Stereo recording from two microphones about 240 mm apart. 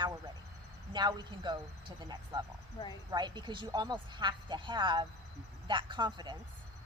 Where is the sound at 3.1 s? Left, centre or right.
Centre.